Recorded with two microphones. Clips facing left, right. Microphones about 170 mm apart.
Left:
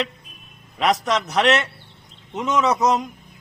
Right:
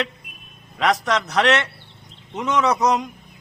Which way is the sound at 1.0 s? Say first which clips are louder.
Even; 5° left (ahead or behind).